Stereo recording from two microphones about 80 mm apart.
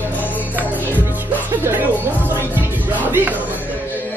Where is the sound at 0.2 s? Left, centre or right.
Left.